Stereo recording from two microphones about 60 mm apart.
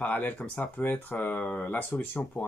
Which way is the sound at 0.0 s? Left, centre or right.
Left.